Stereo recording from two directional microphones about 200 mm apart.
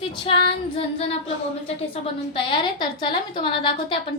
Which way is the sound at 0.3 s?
25° left (ahead or behind).